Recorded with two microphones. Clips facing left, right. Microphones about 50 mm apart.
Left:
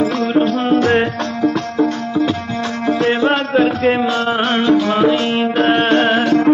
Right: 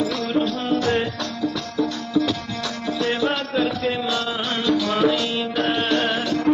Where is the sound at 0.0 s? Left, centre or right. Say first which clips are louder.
Left 7 dB; left.